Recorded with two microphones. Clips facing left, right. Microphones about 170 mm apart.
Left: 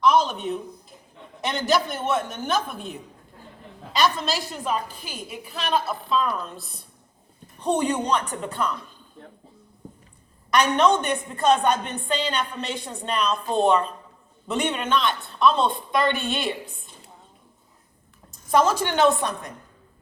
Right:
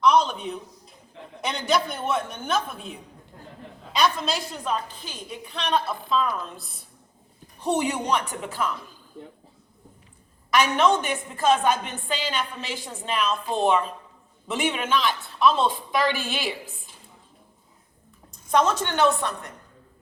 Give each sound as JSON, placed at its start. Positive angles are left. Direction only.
{"t": 0.0, "sound": "a woman's voice", "side_deg": 0}
{"t": 10.5, "sound": "a woman's voice", "side_deg": -5}
{"t": 18.5, "sound": "a woman's voice", "side_deg": 10}